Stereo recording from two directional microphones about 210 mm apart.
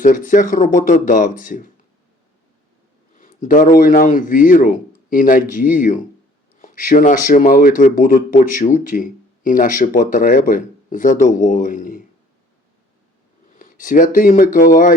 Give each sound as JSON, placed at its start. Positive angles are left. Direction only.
{"t": 0.0, "sound": "speech", "side_deg": 40}
{"t": 3.2, "sound": "speech", "side_deg": 40}
{"t": 13.6, "sound": "speech", "side_deg": 40}